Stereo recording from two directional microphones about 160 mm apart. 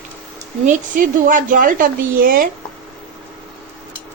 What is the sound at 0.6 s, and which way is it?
A woman's voice, 55° right (ahead or behind).